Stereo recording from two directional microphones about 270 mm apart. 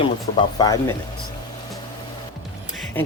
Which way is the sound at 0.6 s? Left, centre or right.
Centre.